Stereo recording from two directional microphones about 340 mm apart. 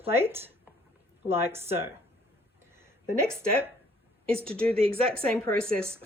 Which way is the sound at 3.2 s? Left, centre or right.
Centre.